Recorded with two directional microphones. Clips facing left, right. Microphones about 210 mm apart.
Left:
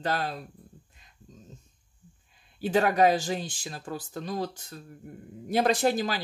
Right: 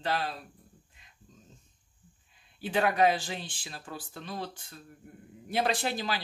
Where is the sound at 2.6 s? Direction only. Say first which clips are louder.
Left 3 dB; 40° left (ahead or behind).